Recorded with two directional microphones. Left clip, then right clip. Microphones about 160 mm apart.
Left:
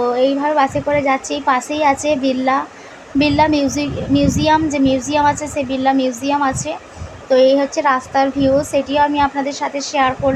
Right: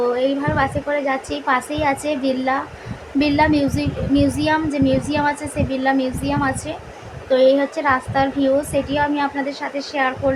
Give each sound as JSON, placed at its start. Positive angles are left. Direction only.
{"t": 0.0, "sound": "a woman's voice", "side_deg": 15}